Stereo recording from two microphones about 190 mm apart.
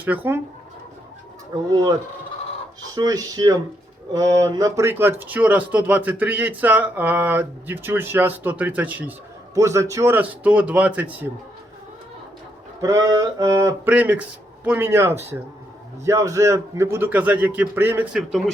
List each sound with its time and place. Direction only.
0.0 s speech: 10° right (ahead or behind)
1.7 s speech: 20° right (ahead or behind)
12.8 s speech: 15° right (ahead or behind); by 18.5 s centre (ahead or behind)